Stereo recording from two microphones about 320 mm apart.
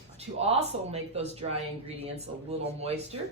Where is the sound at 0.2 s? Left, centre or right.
Centre.